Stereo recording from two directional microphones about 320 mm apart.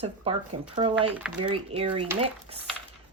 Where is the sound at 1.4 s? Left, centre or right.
Centre.